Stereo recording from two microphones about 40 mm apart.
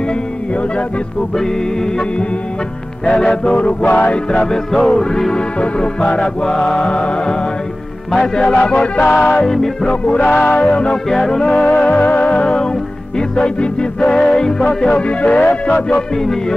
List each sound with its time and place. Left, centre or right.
3.1 s music: centre
3.8 s music: left
4.3 s music: left
6.9 s music: left
8.9 s music: left
9.4 s music: centre
9.8 s music: left
10.3 s music: left
11.1 s music: centre
11.9 s music: left